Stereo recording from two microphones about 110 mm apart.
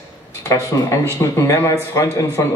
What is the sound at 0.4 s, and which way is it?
Speech, 30° left (ahead or behind).